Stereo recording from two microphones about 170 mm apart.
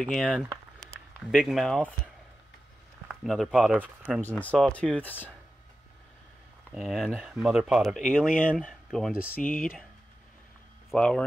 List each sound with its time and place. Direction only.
0.0 s speech: centre (ahead or behind)
3.1 s speech: centre (ahead or behind)
4.2 s speech: 10° left (ahead or behind)
6.7 s speech: centre (ahead or behind)
9.5 s speech: 55° left (ahead or behind)
10.9 s speech: 5° left (ahead or behind)